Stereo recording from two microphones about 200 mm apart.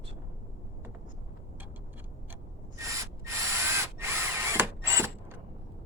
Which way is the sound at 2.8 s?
15° right (ahead or behind).